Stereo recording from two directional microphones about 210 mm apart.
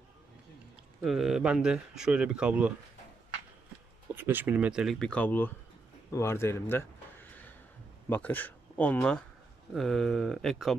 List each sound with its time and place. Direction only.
1.0 s speech: centre (ahead or behind)
4.1 s speech: 10° right (ahead or behind)